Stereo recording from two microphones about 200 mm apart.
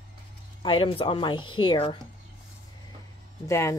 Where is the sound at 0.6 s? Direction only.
25° left (ahead or behind).